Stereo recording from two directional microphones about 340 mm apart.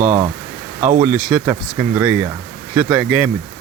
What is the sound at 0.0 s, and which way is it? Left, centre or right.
Speech, right.